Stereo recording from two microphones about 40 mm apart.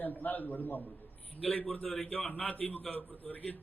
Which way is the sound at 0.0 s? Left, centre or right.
Left.